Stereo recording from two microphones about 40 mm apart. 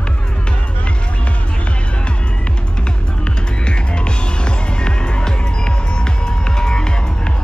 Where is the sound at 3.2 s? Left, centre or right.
Left.